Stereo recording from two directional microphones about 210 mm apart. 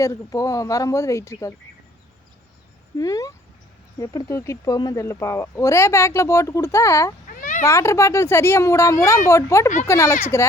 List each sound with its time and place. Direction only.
0.0 s speech: 15° left (ahead or behind)
3.0 s speech: 15° left (ahead or behind)
7.3 s a sound: 40° left (ahead or behind)
7.6 s speech: 15° left (ahead or behind)